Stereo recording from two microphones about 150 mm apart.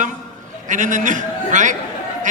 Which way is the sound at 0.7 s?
60° right (ahead or behind).